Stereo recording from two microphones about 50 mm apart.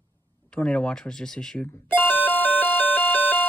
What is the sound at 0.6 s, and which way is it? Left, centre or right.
Speech, left.